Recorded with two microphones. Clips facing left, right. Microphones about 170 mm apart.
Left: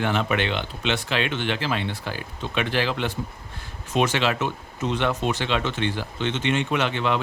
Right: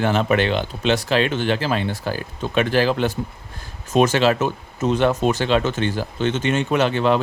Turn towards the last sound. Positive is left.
turn(degrees=-40)  # may be behind; listen again after turning